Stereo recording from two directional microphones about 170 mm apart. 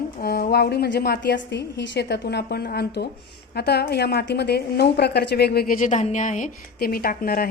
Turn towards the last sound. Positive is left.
turn(degrees=60)  # may be behind; listen again after turning